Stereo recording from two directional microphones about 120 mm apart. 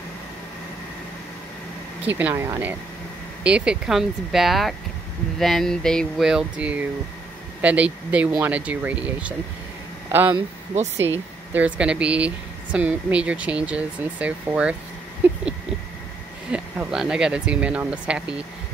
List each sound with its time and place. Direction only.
2.0 s speech: 15° right (ahead or behind); by 6.2 s 5° left (ahead or behind)
6.2 s speech: 5° right (ahead or behind)
11.5 s speech: 10° right (ahead or behind)
16.5 s speech: 5° right (ahead or behind)